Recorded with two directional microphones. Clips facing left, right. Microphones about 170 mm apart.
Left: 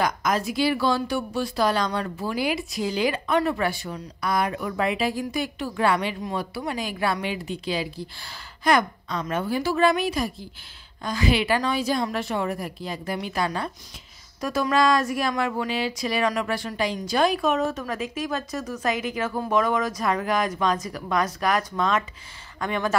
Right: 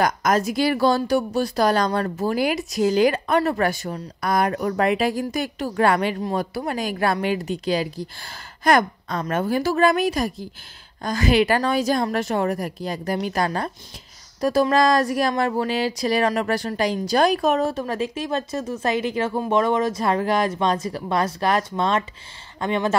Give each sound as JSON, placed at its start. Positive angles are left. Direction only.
{"t": 0.0, "sound": "speech", "side_deg": -45}